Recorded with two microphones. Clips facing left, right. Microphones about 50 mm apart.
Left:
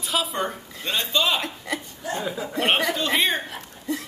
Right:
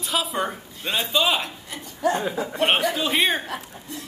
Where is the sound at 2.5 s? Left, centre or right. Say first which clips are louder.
Even; centre.